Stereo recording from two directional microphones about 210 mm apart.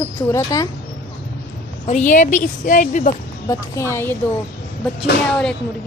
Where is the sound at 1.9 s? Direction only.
35° left (ahead or behind).